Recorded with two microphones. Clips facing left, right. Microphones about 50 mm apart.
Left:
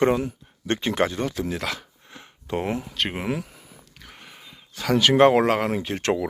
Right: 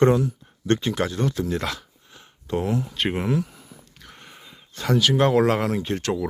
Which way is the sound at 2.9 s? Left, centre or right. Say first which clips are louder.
Right 2 dB; centre.